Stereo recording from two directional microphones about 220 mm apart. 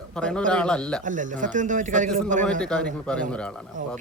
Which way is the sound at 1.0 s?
35° right (ahead or behind).